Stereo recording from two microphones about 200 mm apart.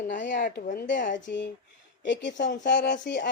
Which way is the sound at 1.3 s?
60° left (ahead or behind).